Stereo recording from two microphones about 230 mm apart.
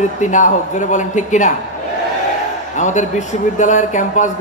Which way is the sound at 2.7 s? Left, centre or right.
Left.